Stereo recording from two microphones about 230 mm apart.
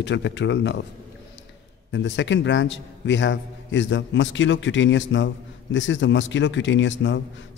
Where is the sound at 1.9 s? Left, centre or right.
Left.